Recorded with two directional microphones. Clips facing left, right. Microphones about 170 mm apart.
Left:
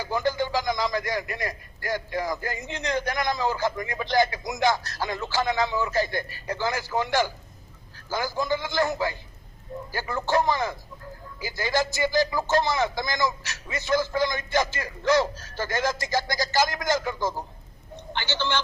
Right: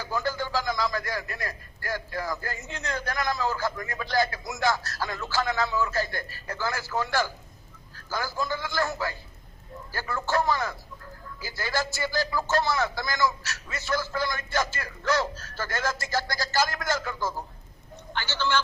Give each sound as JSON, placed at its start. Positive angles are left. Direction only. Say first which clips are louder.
{"t": 0.0, "sound": "a man's voice", "louder": "left 4 dB", "side_deg": 15}